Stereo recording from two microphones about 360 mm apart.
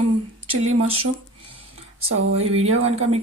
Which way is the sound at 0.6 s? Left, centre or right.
Right.